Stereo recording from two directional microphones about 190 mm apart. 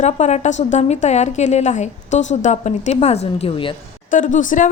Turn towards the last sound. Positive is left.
turn(degrees=40)  # may be behind; listen again after turning